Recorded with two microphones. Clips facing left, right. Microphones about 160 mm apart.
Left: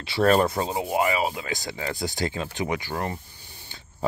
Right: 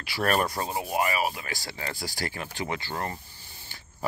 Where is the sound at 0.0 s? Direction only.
25° left (ahead or behind).